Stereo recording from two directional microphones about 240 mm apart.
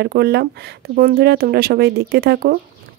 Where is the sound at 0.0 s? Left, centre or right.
Right.